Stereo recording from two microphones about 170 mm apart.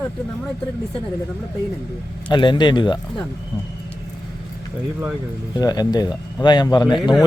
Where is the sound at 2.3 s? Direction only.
25° left (ahead or behind).